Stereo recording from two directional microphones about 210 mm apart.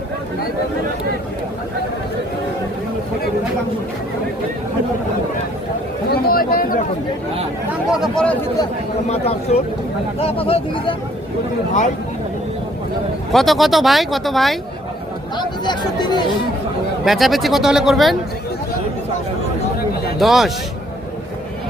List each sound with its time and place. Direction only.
6.1 s chatter: 45° left (ahead or behind)
7.7 s a sound: centre (ahead or behind)
9.0 s speech: 30° left (ahead or behind)
13.3 s speech: centre (ahead or behind)
15.4 s speech: 20° left (ahead or behind)
17.1 s speech: centre (ahead or behind)
20.1 s speech: centre (ahead or behind)